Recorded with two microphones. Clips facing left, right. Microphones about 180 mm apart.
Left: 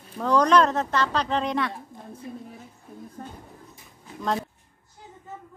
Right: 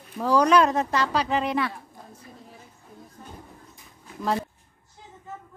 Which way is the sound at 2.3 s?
60° left (ahead or behind).